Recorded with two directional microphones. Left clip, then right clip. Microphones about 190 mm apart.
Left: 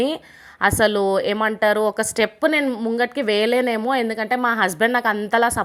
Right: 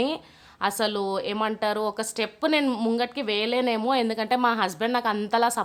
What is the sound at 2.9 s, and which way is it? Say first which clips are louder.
A woman's voice: left 7 dB; 20° left (ahead or behind).